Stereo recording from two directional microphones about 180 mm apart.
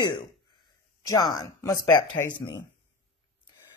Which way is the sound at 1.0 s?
20° left (ahead or behind).